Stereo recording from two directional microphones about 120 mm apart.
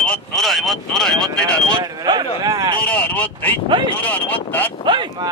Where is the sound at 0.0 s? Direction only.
5° left (ahead or behind).